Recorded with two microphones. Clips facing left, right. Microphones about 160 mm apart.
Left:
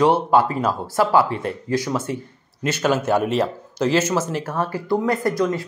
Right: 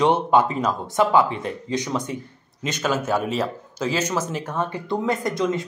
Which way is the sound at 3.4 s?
10° left (ahead or behind).